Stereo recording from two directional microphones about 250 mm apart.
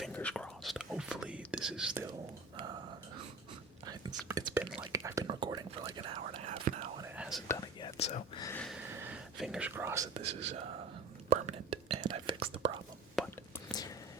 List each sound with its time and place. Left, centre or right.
0.0 s whispering: centre
3.8 s whispering: centre
7.2 s whispering: centre
7.9 s whispering: left
8.4 s a sound: centre
9.0 s whispering: centre
11.3 s whispering: right
13.2 s whispering: centre
13.7 s whispering: centre